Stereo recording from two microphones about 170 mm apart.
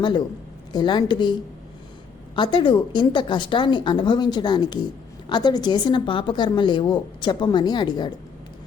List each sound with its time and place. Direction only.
0.0 s a woman's voice: 25° left (ahead or behind)